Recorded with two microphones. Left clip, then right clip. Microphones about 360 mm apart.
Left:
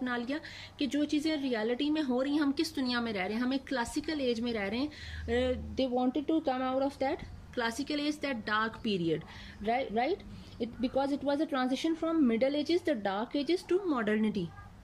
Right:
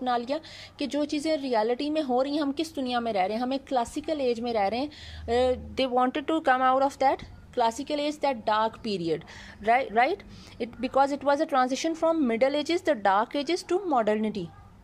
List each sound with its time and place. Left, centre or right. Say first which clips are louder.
0.0 s a woman's voice: right 8 dB; centre